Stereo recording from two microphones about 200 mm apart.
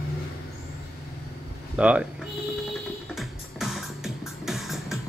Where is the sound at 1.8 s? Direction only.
5° right (ahead or behind).